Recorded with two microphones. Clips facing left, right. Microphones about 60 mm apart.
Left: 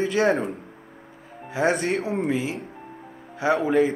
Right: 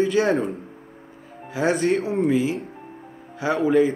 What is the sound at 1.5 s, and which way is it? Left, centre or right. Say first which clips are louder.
Speech: right 2 dB; centre.